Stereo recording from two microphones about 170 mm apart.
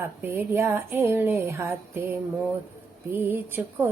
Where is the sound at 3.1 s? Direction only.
10° right (ahead or behind).